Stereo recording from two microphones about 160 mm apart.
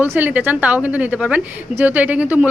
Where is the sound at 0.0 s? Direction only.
10° right (ahead or behind).